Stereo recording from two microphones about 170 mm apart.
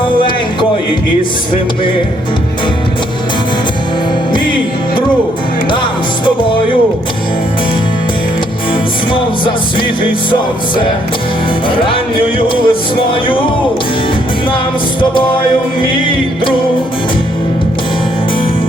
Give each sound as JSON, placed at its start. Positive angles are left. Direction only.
{"t": 9.1, "sound": "music", "side_deg": 30}
{"t": 12.4, "sound": "music", "side_deg": 30}